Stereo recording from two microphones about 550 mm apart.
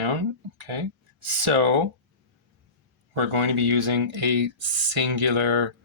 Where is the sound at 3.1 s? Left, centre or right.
Right.